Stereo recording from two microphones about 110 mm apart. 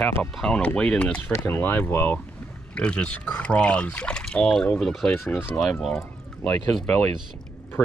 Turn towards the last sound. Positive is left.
turn(degrees=5)  # may be behind; listen again after turning